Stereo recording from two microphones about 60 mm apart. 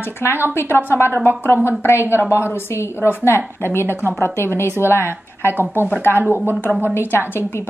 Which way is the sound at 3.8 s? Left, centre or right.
Right.